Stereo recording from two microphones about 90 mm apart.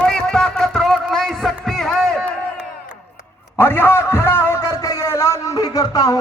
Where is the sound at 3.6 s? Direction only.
25° left (ahead or behind); by 6.2 s 40° left (ahead or behind).